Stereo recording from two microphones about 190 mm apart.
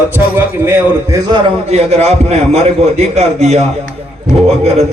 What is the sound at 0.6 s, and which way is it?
Speech, 15° right (ahead or behind).